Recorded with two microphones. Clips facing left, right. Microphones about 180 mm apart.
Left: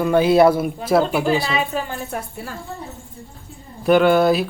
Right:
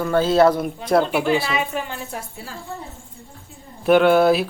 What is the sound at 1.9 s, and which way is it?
Speech, 55° left (ahead or behind).